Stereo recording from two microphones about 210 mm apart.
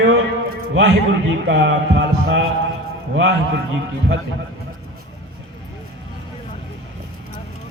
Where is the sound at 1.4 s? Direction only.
60° right (ahead or behind).